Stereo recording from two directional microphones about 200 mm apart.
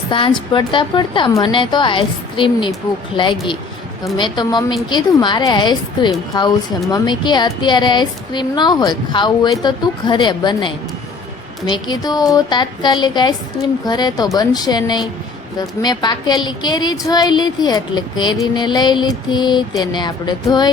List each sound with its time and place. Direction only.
0.1 s a woman's voice: 25° left (ahead or behind)
4.0 s a woman's voice: 20° left (ahead or behind)